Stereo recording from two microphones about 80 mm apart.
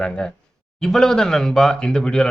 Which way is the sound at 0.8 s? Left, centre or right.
Centre.